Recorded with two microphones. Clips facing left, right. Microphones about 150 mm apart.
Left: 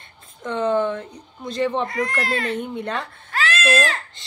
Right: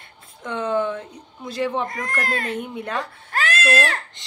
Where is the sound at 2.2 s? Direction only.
45° right (ahead or behind).